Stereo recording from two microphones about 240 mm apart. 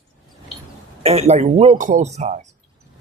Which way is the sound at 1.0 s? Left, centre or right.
Right.